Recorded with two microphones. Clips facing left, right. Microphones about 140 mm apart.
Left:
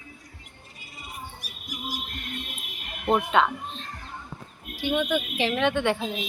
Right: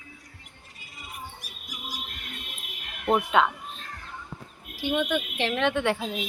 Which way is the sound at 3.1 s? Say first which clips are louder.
Even; 5° right (ahead or behind).